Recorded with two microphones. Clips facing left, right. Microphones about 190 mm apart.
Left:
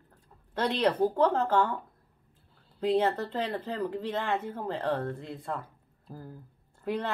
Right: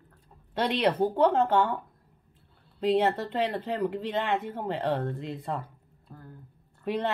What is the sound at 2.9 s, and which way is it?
Speech, 15° right (ahead or behind).